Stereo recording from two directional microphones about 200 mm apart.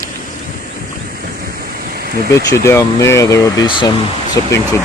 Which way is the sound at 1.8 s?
45° right (ahead or behind).